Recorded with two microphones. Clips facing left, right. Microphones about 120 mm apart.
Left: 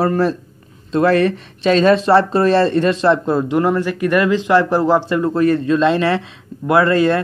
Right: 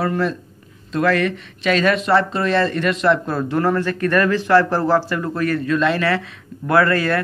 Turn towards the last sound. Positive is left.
turn(degrees=20)  # may be behind; listen again after turning